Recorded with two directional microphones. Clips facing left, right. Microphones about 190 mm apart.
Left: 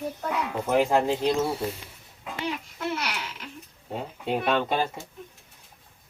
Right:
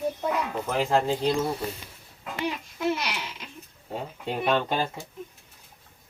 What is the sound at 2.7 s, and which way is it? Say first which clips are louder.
Speech: right 3 dB; 15° right (ahead or behind).